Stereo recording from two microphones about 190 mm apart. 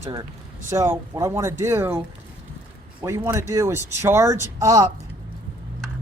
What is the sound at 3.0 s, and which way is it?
Speech, 15° right (ahead or behind).